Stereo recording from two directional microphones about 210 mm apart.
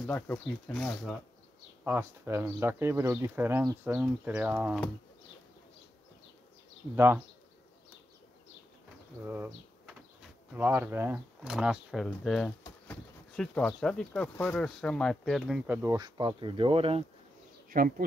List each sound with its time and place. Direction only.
0.0 s speech: 10° left (ahead or behind)
1.9 s speech: 10° right (ahead or behind)
9.2 s speech: 10° right (ahead or behind); by 17.0 s 25° right (ahead or behind)
17.6 s speech: 40° right (ahead or behind)